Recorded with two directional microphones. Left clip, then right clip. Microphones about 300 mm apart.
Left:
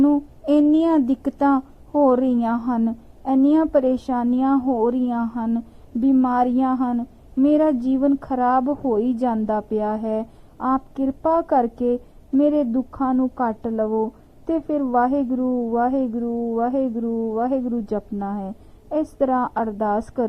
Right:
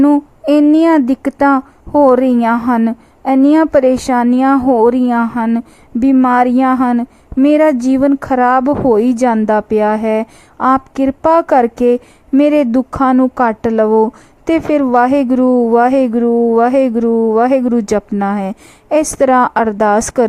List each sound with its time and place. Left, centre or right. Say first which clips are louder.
0.0 s speech: right 8 dB; right